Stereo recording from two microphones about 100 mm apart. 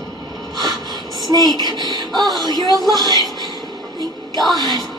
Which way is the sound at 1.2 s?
45° right (ahead or behind).